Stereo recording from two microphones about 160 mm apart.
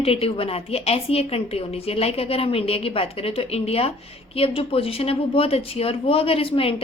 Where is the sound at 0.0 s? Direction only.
35° left (ahead or behind).